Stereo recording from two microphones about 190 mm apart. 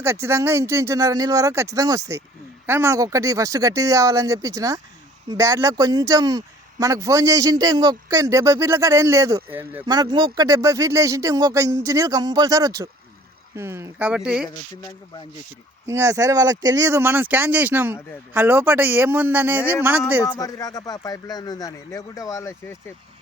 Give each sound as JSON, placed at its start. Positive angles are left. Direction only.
{"t": 0.0, "sound": "speech", "side_deg": -15}
{"t": 9.8, "sound": "speech", "side_deg": -20}
{"t": 15.9, "sound": "speech", "side_deg": -15}
{"t": 20.2, "sound": "speech", "side_deg": 15}